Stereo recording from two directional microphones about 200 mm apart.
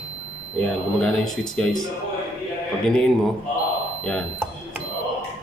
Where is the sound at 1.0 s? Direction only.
Centre (ahead or behind).